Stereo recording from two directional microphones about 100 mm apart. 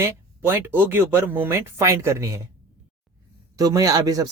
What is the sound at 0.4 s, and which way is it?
Speech, 20° right (ahead or behind).